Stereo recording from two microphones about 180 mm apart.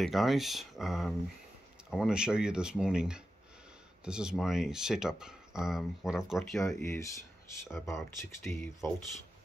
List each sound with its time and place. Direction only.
0.0 s speech: centre (ahead or behind)
6.6 s speech: 15° left (ahead or behind)